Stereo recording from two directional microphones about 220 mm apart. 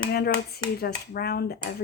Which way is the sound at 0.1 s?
45° left (ahead or behind).